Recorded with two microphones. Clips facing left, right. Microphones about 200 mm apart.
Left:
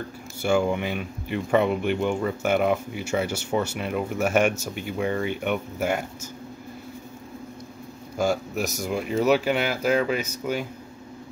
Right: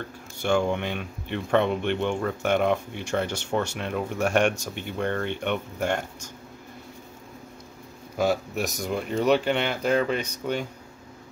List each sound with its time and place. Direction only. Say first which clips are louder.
0.0 s speech: left 2 dB; 5° left (ahead or behind)
8.2 s speech: even; centre (ahead or behind)